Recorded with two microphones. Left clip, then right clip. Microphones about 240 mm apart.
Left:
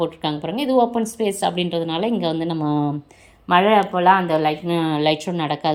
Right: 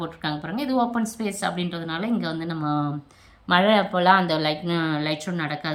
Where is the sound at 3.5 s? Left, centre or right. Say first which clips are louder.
Left 4 dB; right.